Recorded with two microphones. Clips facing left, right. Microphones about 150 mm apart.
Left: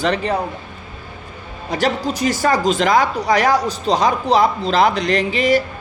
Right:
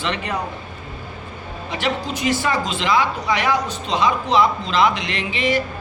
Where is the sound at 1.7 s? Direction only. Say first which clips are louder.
Left 5 dB; 40° left (ahead or behind).